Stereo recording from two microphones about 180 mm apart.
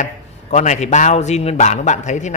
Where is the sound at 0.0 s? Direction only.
40° left (ahead or behind).